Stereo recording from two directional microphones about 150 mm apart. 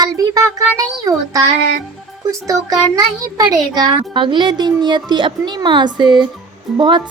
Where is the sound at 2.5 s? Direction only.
25° right (ahead or behind).